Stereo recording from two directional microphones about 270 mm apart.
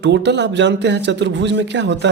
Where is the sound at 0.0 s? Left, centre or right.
Right.